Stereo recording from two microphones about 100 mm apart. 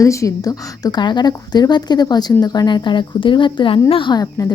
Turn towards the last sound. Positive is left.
turn(degrees=50)  # may be behind; listen again after turning